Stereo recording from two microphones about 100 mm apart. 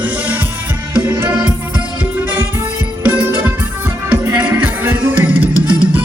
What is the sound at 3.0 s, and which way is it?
Music, 20° right (ahead or behind).